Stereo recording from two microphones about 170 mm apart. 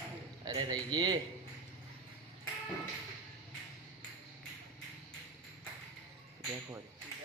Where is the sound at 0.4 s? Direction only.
25° right (ahead or behind).